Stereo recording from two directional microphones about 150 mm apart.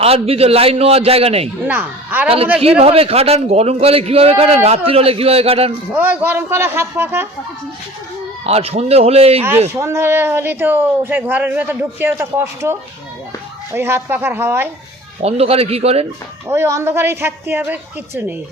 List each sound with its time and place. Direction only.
0.0 s a man's voice: 40° right (ahead or behind)
1.6 s speech: 10° right (ahead or behind)
2.6 s a man's voice: 40° right (ahead or behind)
5.9 s speech: 10° right (ahead or behind)
8.4 s a man's voice: 45° right (ahead or behind)
9.8 s speech: 15° right (ahead or behind)
13.7 s speech: 15° right (ahead or behind)
15.2 s a man's voice: 45° right (ahead or behind)
16.5 s speech: 20° right (ahead or behind)